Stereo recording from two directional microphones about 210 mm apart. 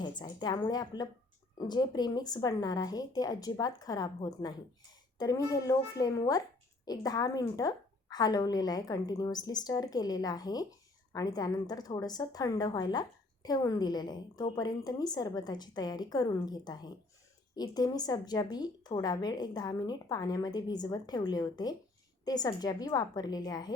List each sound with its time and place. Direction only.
0.0 s a woman's voice: 20° left (ahead or behind)